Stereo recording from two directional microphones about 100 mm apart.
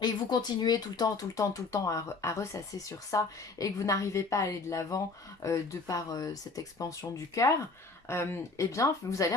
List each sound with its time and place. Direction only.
0.0 s a woman's voice: 45° left (ahead or behind)